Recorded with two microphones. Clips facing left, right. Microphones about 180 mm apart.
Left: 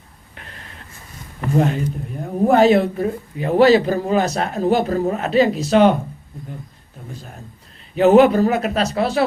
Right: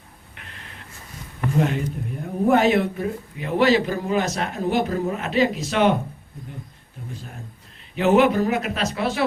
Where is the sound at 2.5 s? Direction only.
35° left (ahead or behind).